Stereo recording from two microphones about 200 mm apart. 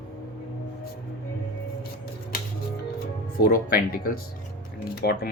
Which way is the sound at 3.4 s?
45° left (ahead or behind).